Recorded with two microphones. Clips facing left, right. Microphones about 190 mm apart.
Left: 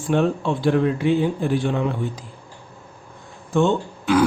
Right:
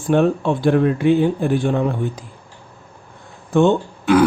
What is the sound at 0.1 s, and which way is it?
Speech, 55° right (ahead or behind).